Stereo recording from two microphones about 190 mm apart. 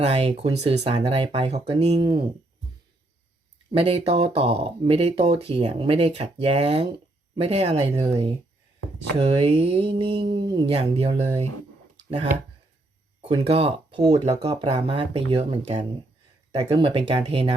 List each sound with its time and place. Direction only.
0.0 s speech: 30° right (ahead or behind)
3.7 s speech: 30° right (ahead or behind)
13.5 s speech: 30° right (ahead or behind)